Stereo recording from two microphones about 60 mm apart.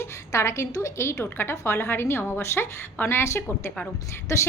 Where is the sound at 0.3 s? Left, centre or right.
Left.